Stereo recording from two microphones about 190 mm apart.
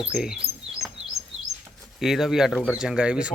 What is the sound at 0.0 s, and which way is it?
Speech, 5° right (ahead or behind).